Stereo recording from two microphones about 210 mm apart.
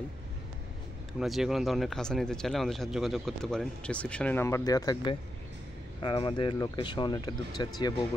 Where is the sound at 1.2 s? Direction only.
Centre (ahead or behind).